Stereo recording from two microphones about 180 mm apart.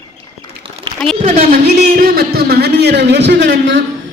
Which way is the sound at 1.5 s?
55° right (ahead or behind).